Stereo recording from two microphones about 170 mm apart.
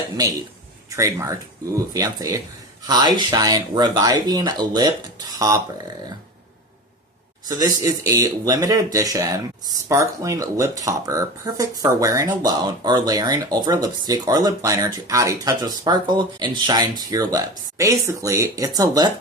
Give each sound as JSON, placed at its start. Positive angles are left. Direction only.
{"t": 0.9, "sound": "speech", "side_deg": -15}
{"t": 7.4, "sound": "speech", "side_deg": -20}